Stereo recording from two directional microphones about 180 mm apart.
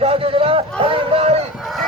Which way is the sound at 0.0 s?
30° right (ahead or behind).